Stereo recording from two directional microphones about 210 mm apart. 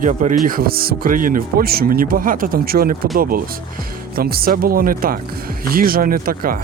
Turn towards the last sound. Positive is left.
turn(degrees=-45)  # may be behind; listen again after turning